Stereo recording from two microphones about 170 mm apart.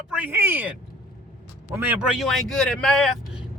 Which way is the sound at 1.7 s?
10° right (ahead or behind).